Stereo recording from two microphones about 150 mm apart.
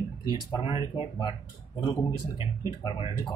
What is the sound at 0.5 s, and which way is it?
Speech, 40° left (ahead or behind).